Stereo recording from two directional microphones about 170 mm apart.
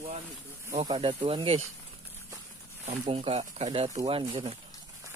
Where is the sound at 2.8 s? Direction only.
35° right (ahead or behind).